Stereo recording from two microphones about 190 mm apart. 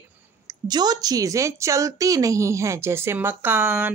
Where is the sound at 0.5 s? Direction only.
20° right (ahead or behind).